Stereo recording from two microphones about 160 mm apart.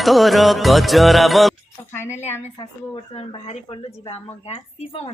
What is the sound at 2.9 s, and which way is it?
Speech, 40° left (ahead or behind).